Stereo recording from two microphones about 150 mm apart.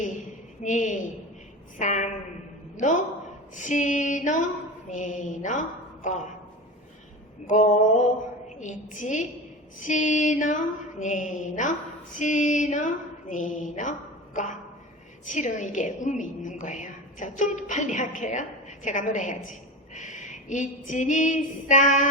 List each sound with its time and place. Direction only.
0.6 s a woman's voice: 55° left (ahead or behind)
7.4 s a woman's voice: 55° left (ahead or behind)
15.2 s a woman's voice: 55° left (ahead or behind)